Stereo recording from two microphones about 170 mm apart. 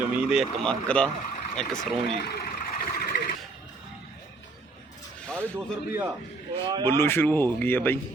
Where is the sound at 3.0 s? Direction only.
65° left (ahead or behind).